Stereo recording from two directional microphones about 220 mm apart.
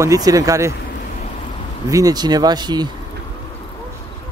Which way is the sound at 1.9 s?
15° right (ahead or behind).